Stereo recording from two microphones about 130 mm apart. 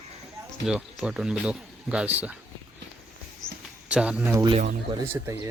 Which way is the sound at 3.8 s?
10° right (ahead or behind).